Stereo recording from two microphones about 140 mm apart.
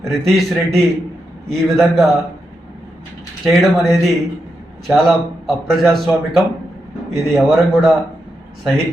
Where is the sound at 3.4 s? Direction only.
Centre (ahead or behind).